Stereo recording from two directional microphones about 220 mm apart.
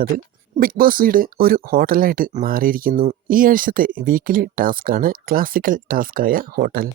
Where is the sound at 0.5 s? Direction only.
40° right (ahead or behind).